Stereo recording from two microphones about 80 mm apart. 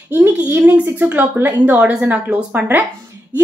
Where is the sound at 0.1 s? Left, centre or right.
Right.